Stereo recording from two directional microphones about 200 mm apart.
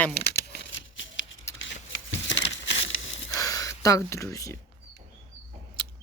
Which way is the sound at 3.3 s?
15° left (ahead or behind).